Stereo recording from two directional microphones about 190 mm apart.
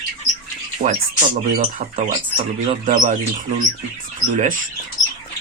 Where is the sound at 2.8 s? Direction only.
40° right (ahead or behind).